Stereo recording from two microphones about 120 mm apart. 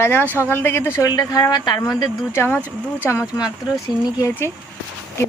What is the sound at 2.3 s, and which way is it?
Speech, 20° left (ahead or behind).